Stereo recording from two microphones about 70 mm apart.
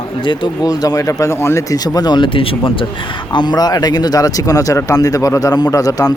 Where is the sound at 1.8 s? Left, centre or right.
Left.